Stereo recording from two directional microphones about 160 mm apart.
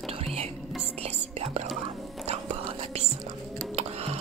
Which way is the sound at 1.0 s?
45° right (ahead or behind).